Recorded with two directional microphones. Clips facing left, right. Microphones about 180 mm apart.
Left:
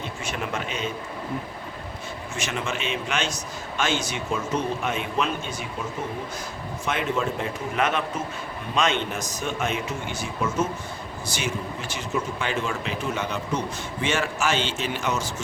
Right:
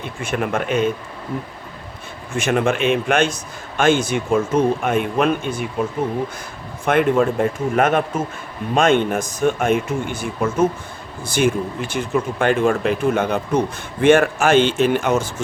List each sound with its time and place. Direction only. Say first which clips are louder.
0.2 s speech: right 10 dB; 55° right (ahead or behind)
2.3 s speech: right 12 dB; 55° right (ahead or behind)
6.8 s speech: right 10 dB; 55° right (ahead or behind)